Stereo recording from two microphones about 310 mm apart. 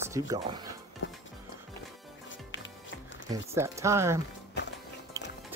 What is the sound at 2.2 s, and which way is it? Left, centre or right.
Music, left.